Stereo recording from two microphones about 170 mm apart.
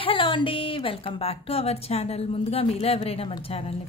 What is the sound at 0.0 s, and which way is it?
A woman's voice, 30° left (ahead or behind).